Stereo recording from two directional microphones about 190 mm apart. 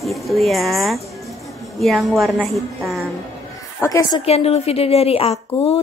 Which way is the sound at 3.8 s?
20° left (ahead or behind).